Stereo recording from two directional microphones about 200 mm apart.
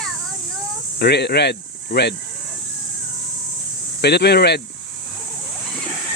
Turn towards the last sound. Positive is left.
turn(degrees=55)  # may be behind; listen again after turning